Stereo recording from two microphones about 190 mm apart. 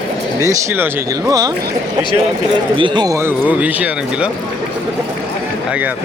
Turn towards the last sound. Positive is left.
turn(degrees=-5)  # may be behind; listen again after turning